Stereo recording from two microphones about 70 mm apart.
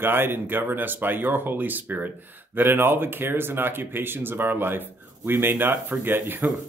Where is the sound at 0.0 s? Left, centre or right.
Right.